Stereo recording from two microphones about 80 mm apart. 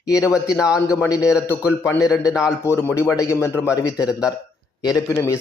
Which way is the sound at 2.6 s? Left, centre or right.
Left.